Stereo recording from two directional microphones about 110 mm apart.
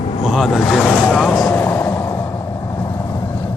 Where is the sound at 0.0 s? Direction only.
90° left.